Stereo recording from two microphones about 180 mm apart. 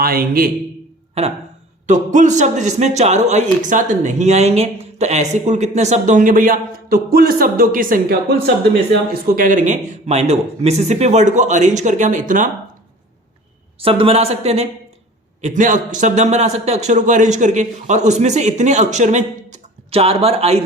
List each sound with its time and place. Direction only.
0.0 s a man's voice: 55° right (ahead or behind)
1.9 s speech: 40° right (ahead or behind)
13.8 s speech: 30° right (ahead or behind)